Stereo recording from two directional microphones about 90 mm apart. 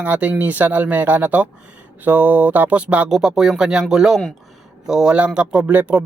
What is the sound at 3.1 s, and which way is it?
Speech, 5° right (ahead or behind).